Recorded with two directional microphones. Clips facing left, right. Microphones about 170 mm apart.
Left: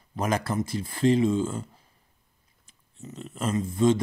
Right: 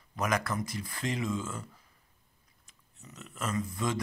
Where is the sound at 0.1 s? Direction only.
30° left (ahead or behind).